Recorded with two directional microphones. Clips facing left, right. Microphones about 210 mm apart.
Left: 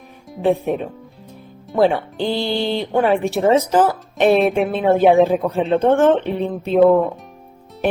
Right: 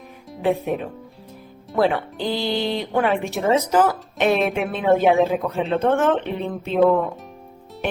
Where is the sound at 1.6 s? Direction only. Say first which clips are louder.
Left 4 dB; centre (ahead or behind).